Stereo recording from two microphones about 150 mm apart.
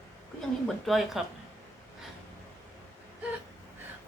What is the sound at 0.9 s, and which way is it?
Speech, centre (ahead or behind).